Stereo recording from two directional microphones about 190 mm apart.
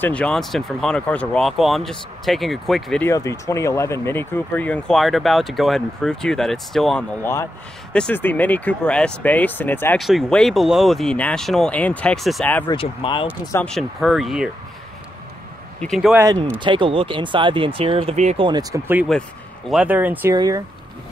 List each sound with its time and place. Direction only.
0.0 s speech: 5° left (ahead or behind)
3.1 s speech: 15° left (ahead or behind)
12.6 s speech: 30° left (ahead or behind)
13.5 s speech: 5° left (ahead or behind)
15.8 s speech: centre (ahead or behind)
16.2 s speech: 15° right (ahead or behind); by 18.5 s 35° right (ahead or behind)
18.5 s speech: 20° right (ahead or behind)